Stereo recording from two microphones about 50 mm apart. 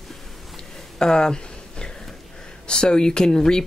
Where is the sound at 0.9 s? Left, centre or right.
Centre.